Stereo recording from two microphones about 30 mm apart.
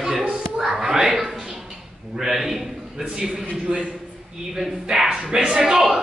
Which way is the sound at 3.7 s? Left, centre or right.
Right.